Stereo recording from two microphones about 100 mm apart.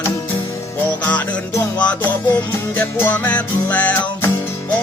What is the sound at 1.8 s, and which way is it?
Music, 15° left (ahead or behind).